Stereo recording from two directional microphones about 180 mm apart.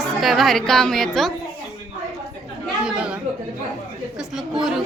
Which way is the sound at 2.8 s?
5° right (ahead or behind).